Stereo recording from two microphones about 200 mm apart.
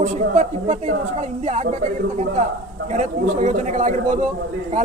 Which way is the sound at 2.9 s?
35° right (ahead or behind).